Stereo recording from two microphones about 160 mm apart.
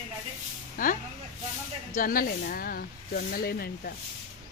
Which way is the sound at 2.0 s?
60° left (ahead or behind).